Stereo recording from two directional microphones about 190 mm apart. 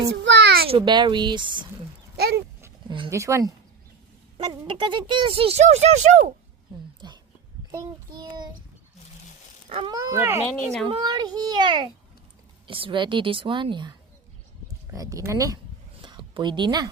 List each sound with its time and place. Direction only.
0.3 s a sound: 65° right (ahead or behind)
0.7 s speech: 25° right (ahead or behind)
2.1 s dog: 55° right (ahead or behind)
3.1 s speech: 15° right (ahead or behind); by 6.3 s 35° right (ahead or behind)
7.0 s a sound: 25° right (ahead or behind)
7.7 s speech: 20° right (ahead or behind)
9.6 s speech: 30° right (ahead or behind)
9.9 s speech: 15° right (ahead or behind)
10.5 s speech: 5° left (ahead or behind)
10.8 s speech: 25° right (ahead or behind)
14.9 s speech: 15° right (ahead or behind)
16.0 s a sound: 25° right (ahead or behind)